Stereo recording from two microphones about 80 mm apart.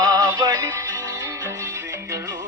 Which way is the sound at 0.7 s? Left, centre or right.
Right.